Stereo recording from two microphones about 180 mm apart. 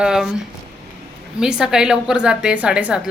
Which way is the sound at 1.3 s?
5° right (ahead or behind).